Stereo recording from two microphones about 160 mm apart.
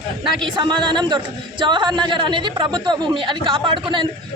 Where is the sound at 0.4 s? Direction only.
30° right (ahead or behind).